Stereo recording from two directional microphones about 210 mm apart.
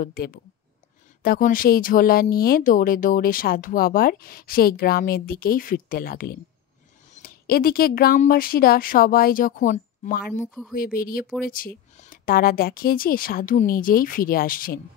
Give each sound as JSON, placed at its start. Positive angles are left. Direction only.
{"t": 0.0, "sound": "speech", "side_deg": 45}